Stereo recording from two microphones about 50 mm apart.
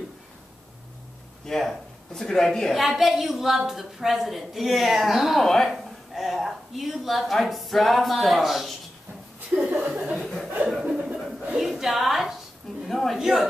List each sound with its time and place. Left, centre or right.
1.4 s a man's voice: centre
2.8 s a woman's voice: centre
9.5 s chuckle: right
10.2 s chuckle: centre
10.8 s chuckle: right
11.5 s a sound: centre
13.2 s a woman's voice: centre